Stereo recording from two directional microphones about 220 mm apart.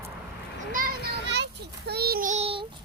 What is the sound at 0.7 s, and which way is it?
Children playing, 45° right (ahead or behind).